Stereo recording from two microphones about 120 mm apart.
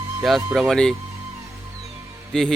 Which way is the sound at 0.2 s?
Centre (ahead or behind).